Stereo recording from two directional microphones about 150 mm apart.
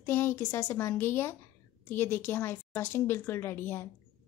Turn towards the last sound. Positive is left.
turn(degrees=15)  # may be behind; listen again after turning